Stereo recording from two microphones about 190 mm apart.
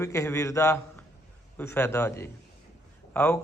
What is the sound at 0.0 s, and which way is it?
A man's voice, 15° left (ahead or behind).